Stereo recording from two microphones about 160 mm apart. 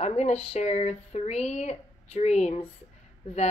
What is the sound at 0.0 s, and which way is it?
Speech, 45° left (ahead or behind).